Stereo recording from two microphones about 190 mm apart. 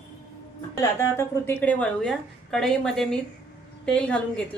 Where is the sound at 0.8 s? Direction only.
15° left (ahead or behind).